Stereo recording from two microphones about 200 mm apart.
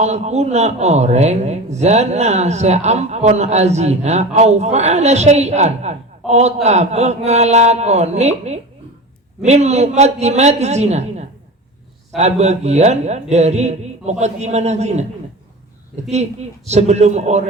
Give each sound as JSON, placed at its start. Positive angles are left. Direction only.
{"t": 0.0, "sound": "a man's voice", "side_deg": -35}
{"t": 16.6, "sound": "a man's voice", "side_deg": -35}